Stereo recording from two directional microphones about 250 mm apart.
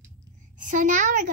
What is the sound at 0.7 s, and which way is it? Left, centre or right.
Speech, right.